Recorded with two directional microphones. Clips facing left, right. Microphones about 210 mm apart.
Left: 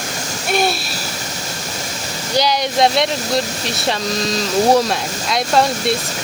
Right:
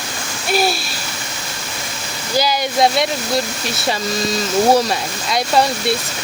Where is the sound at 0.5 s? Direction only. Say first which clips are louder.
Even; centre (ahead or behind).